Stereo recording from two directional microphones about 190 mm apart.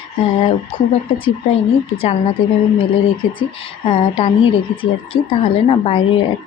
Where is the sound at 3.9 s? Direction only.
30° left (ahead or behind).